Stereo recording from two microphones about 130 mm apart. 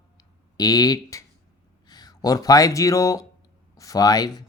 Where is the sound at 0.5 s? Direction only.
30° left (ahead or behind).